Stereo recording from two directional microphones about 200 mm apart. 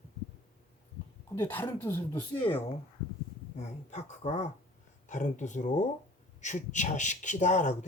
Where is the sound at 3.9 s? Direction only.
35° left (ahead or behind).